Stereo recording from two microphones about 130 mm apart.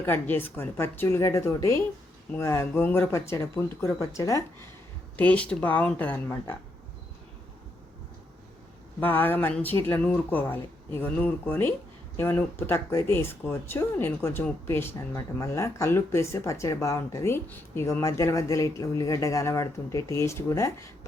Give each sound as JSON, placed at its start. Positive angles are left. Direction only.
{"t": 0.0, "sound": "speech", "side_deg": 15}
{"t": 5.1, "sound": "speech", "side_deg": 10}
{"t": 9.0, "sound": "speech", "side_deg": 15}